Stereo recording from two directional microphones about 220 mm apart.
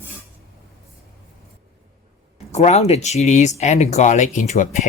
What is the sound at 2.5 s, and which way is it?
Speech, 30° left (ahead or behind).